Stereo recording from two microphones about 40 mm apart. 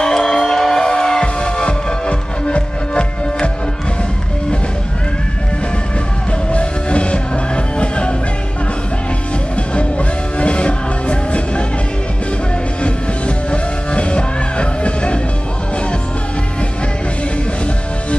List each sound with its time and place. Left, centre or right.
0.0 s music: centre
6.5 s music: left
9.8 s music: left
13.5 s music: left